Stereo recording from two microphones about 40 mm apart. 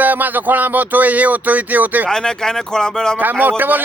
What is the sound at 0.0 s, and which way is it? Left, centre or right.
A man's voice, right.